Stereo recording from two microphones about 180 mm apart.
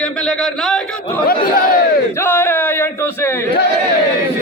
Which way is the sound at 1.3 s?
50° left (ahead or behind).